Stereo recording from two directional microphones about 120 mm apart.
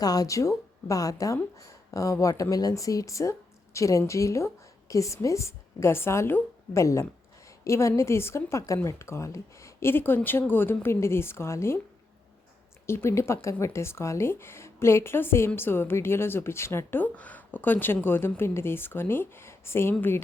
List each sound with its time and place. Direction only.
0.0 s speech: 30° left (ahead or behind)
12.9 s speech: 20° left (ahead or behind)